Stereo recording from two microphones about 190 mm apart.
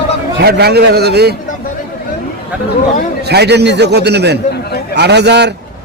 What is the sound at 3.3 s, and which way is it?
A man's voice, 60° right (ahead or behind).